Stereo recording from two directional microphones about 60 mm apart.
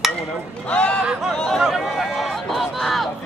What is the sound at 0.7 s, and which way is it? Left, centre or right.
Speech, centre.